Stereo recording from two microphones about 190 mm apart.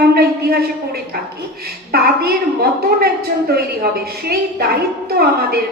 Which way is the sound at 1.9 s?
55° right (ahead or behind).